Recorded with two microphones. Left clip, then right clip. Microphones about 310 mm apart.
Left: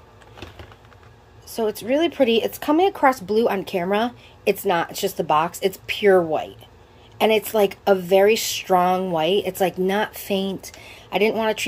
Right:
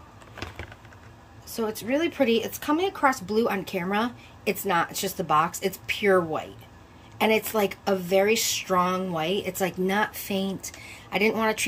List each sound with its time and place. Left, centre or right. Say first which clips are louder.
1.5 s a woman's voice: left 6 dB; centre